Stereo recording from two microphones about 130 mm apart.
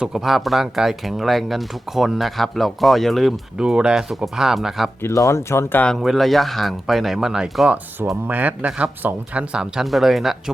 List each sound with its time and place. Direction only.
0.0 s speech: 5° right (ahead or behind)
5.0 s speech: 25° left (ahead or behind)
5.8 s speech: centre (ahead or behind)
8.1 s speech: 10° right (ahead or behind)